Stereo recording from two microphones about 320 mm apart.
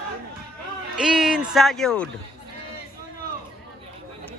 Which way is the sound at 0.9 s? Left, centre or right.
Centre.